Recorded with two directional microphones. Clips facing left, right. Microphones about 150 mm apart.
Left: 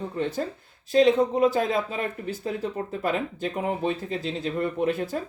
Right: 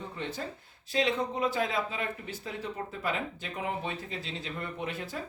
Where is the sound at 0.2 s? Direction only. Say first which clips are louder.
Left 9 dB; 45° left (ahead or behind).